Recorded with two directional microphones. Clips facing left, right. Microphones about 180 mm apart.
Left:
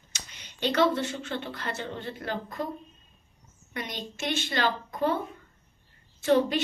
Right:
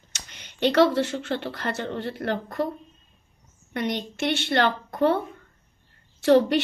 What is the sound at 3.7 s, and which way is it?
A woman's voice, 65° right (ahead or behind).